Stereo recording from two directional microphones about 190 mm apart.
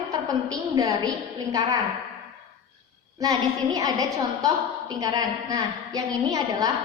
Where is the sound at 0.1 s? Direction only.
20° right (ahead or behind).